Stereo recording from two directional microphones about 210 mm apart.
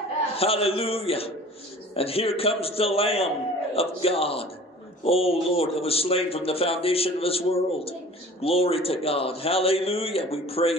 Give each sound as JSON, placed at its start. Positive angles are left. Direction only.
{"t": 0.4, "sound": "a man's voice", "side_deg": 25}